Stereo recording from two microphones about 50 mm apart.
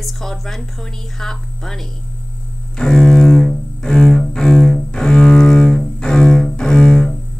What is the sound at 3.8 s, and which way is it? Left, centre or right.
Cello, centre.